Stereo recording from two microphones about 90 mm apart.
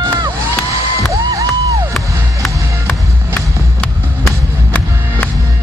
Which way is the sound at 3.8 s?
15° left (ahead or behind).